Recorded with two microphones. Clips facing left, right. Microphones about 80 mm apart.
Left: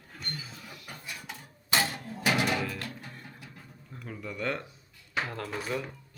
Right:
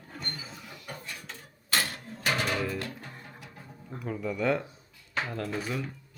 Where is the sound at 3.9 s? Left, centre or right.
Centre.